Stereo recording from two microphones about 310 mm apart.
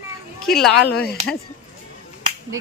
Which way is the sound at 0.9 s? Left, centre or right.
Left.